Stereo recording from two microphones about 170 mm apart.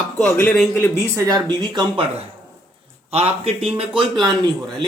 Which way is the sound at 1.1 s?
25° right (ahead or behind).